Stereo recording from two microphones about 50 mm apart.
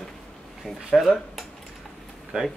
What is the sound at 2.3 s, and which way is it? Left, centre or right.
Speech, centre.